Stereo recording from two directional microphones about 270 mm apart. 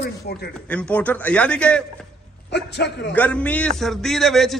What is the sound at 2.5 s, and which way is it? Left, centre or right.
Speech, left.